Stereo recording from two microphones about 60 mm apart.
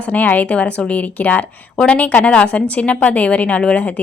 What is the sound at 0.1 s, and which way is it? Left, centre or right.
A woman's voice, left.